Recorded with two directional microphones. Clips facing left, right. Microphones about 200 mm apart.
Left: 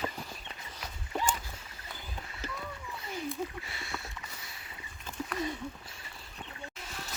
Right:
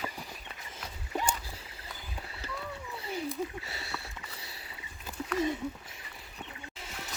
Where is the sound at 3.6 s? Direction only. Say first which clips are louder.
Right 2 dB; 40° right (ahead or behind).